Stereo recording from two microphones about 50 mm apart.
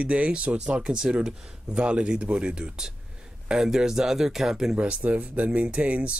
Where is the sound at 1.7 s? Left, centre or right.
Right.